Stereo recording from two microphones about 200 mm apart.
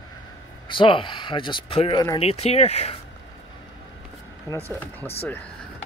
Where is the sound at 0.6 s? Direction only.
25° left (ahead or behind).